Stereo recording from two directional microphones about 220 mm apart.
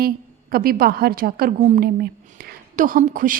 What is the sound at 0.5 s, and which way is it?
A woman's voice, 40° right (ahead or behind).